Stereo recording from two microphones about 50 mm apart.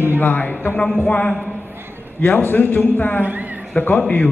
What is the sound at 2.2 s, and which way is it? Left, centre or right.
A man's voice, left.